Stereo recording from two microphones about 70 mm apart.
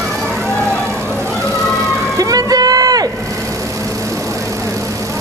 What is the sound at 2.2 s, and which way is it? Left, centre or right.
Vehicle, right.